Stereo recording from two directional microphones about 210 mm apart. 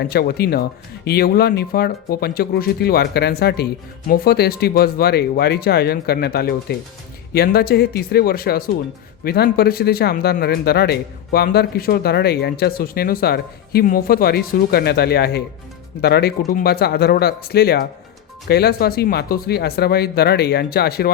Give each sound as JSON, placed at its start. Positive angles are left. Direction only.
{"t": 0.0, "sound": "speech", "side_deg": 50}